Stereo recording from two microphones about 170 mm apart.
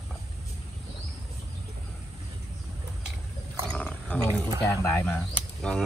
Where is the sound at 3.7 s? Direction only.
5° left (ahead or behind).